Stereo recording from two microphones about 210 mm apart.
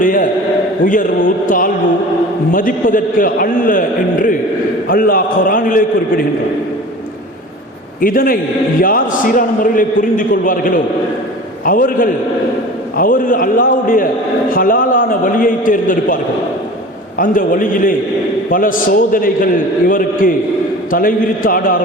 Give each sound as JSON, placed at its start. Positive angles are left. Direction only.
{"t": 0.0, "sound": "a man's voice", "side_deg": 40}
{"t": 8.0, "sound": "a man's voice", "side_deg": 40}
{"t": 17.2, "sound": "a man's voice", "side_deg": 40}